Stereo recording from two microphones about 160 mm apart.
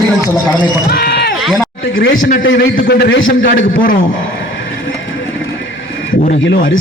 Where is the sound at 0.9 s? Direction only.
90° left.